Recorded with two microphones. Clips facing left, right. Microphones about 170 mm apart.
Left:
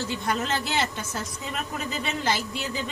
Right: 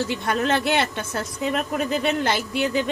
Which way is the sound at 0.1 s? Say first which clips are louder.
Right 5 dB; 60° right (ahead or behind).